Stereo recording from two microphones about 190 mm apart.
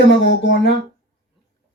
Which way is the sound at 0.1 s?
70° left (ahead or behind).